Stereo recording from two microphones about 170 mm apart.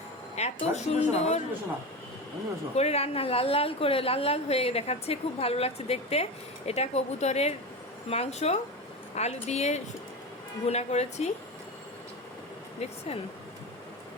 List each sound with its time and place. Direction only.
0.3 s a woman's voice: 40° left (ahead or behind)
2.7 s a woman's voice: 35° left (ahead or behind)